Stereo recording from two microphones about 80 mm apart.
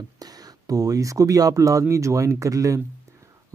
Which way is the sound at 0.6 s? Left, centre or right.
Right.